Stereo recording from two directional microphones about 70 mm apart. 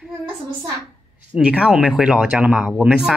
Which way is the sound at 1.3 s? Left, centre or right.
Centre.